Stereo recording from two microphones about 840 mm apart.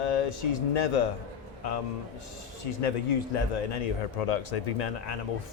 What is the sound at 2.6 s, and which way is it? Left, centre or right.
A man's voice, left.